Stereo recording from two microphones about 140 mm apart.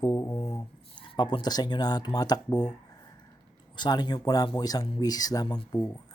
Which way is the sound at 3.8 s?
30° left (ahead or behind).